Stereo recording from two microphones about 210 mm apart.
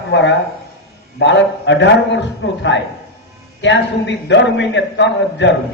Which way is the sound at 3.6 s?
60° left (ahead or behind).